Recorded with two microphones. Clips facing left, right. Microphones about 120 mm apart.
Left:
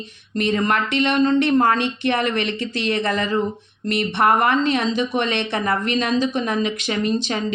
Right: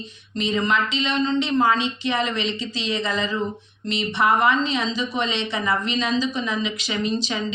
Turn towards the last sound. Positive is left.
turn(degrees=55)  # may be behind; listen again after turning